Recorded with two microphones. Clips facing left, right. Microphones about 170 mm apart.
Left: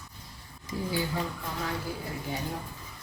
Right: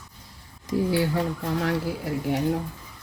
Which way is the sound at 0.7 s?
75° right (ahead or behind).